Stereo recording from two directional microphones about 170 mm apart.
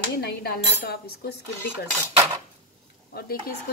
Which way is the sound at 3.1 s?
70° left (ahead or behind).